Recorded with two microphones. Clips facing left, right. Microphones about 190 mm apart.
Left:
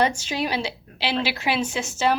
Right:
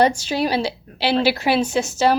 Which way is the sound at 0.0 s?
35° right (ahead or behind).